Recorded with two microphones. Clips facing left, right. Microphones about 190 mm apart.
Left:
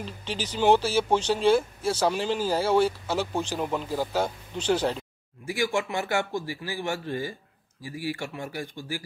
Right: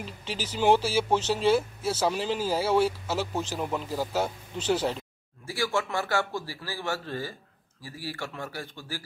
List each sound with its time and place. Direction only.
0.0 s speech: 5° right (ahead or behind)
5.4 s speech: 15° left (ahead or behind)